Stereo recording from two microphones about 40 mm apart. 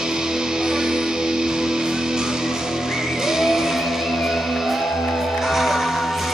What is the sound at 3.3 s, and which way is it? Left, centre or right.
Music, centre.